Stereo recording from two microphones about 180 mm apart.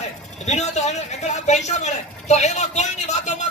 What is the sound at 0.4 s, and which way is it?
Speech, 40° left (ahead or behind).